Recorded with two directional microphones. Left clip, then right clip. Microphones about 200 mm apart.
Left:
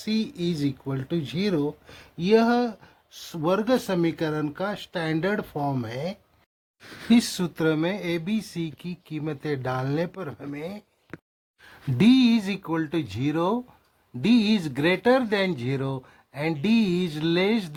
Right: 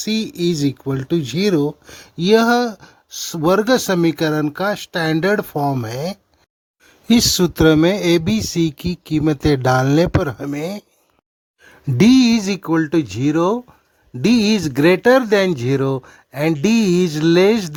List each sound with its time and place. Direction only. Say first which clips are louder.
0.0 s speech: right 8 dB; 45° right (ahead or behind)
11.9 s speech: right 7 dB; 45° right (ahead or behind)